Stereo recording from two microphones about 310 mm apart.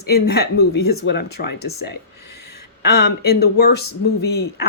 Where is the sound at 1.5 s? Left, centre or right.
Left.